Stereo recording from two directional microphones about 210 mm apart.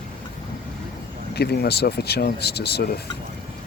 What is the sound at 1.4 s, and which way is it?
Speech, 50° left (ahead or behind).